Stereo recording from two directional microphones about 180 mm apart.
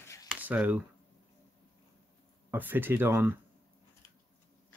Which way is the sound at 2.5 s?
10° right (ahead or behind).